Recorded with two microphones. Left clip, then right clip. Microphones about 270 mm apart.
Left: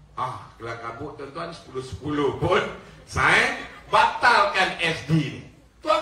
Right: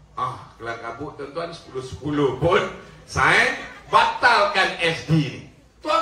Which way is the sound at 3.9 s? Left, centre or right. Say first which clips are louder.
Right 1 dB; right.